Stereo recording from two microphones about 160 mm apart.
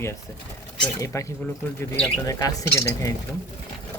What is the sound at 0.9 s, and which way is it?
Speech, 20° left (ahead or behind).